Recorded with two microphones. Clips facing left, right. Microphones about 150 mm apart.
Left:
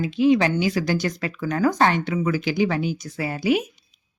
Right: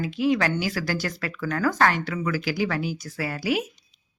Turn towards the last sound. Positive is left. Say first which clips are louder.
# left 4 dB
turn(degrees=20)  # may be behind; listen again after turning